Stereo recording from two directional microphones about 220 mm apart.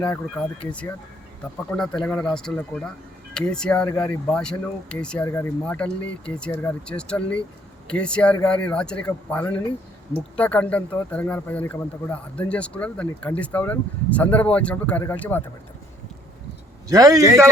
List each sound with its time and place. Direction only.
0.0 s speech: 5° left (ahead or behind)
16.9 s a man's voice: 15° right (ahead or behind)